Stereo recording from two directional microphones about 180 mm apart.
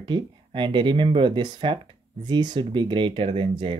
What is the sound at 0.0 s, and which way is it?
Speech, 25° right (ahead or behind).